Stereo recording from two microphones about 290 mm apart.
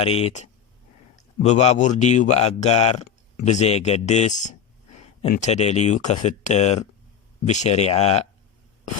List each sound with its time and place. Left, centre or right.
0.0 s speech: centre